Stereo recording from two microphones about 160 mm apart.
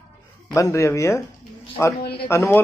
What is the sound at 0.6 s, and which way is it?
Speech, 20° left (ahead or behind).